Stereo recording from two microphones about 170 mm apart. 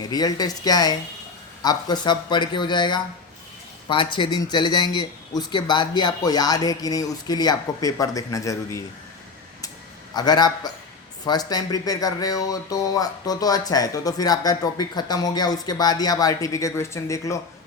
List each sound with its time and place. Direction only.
0.1 s speech: 25° left (ahead or behind)
10.2 s speech: 25° left (ahead or behind)